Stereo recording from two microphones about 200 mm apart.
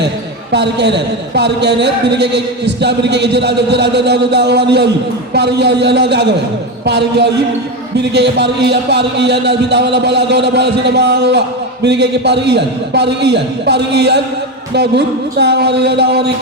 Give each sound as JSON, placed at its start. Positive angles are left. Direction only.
{"t": 0.5, "sound": "a man's voice", "side_deg": -60}